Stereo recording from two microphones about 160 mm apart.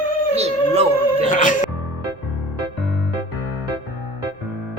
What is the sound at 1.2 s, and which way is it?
Music, 50° left (ahead or behind).